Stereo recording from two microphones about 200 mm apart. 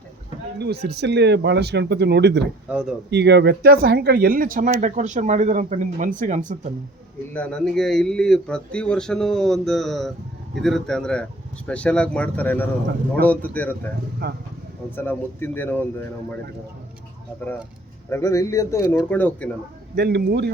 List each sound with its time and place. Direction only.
0.6 s speech: 55° right (ahead or behind)
2.6 s speech: 5° right (ahead or behind)
3.1 s speech: 60° right (ahead or behind); by 6.6 s 40° right (ahead or behind)
7.3 s speech: 5° left (ahead or behind)
14.2 s speech: 50° right (ahead or behind)
14.9 s speech: 10° left (ahead or behind)
18.1 s speech: 15° left (ahead or behind)
20.0 s speech: 55° right (ahead or behind)